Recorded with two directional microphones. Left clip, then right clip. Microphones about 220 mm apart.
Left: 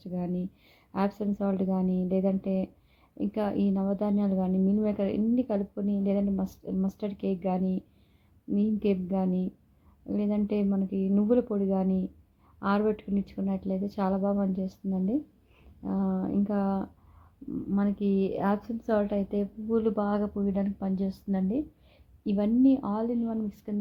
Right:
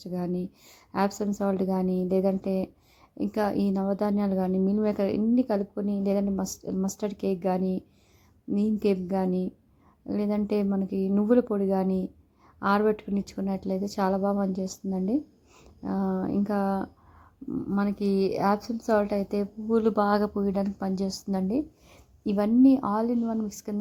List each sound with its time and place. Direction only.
0.0 s a woman's voice: 15° right (ahead or behind)